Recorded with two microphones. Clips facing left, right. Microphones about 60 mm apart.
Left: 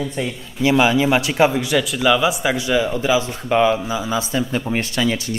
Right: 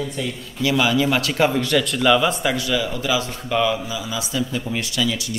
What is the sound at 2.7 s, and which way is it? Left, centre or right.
A man's voice, left.